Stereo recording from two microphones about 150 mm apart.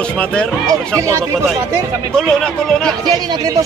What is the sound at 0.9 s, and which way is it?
Speech, 20° right (ahead or behind).